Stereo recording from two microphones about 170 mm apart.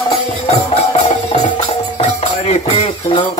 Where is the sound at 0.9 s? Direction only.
40° left (ahead or behind).